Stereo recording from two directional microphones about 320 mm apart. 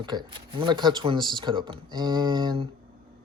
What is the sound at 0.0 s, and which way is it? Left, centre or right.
Speech, centre.